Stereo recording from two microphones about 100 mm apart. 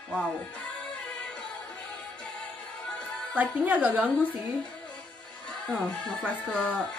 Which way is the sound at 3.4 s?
15° right (ahead or behind).